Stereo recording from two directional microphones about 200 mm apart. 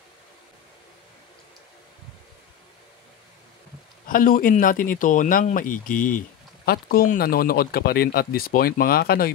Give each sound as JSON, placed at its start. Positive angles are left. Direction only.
{"t": 4.1, "sound": "speech", "side_deg": 45}